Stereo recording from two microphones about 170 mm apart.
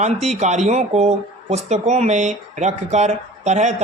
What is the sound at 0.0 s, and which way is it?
Speech, 40° right (ahead or behind).